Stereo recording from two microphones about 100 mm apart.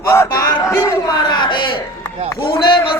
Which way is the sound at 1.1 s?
50° left (ahead or behind).